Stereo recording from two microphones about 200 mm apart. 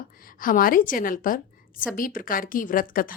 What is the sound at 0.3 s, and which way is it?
A woman's voice, 45° left (ahead or behind).